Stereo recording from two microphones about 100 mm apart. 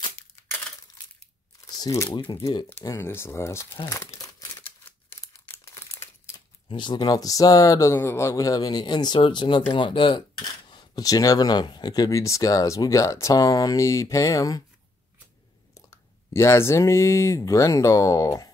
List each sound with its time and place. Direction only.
1.7 s a sound: 40° left (ahead or behind)
2.0 s speech: 50° left (ahead or behind)
2.8 s speech: 35° left (ahead or behind)
3.8 s crumpling: 35° left (ahead or behind)
6.7 s speech: 50° left (ahead or behind); by 14.6 s 35° left (ahead or behind)
15.7 s speech: 35° left (ahead or behind)